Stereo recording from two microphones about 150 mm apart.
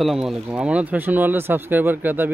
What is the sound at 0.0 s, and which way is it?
Speech, centre (ahead or behind).